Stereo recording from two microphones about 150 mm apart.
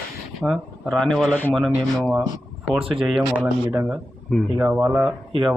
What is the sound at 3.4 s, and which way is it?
Speech, 15° right (ahead or behind).